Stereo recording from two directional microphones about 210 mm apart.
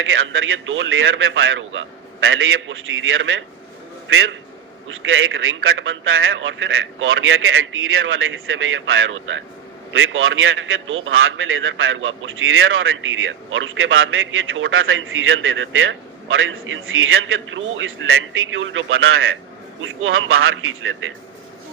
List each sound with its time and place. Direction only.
0.0 s a man's voice: 70° right (ahead or behind)